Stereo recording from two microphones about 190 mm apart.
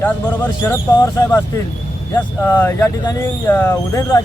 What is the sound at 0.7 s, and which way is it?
Speech, 15° left (ahead or behind).